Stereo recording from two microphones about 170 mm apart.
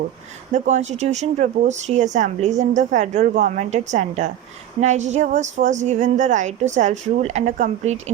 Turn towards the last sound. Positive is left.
turn(degrees=-40)  # may be behind; listen again after turning